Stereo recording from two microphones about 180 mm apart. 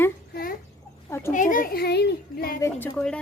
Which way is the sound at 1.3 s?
45° left (ahead or behind).